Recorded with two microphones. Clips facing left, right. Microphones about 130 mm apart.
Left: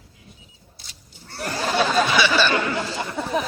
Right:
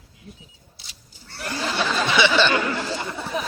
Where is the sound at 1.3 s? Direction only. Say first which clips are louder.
Left 2 dB; 45° left (ahead or behind).